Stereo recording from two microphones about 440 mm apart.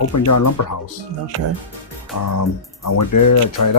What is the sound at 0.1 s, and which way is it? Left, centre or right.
Speech, left.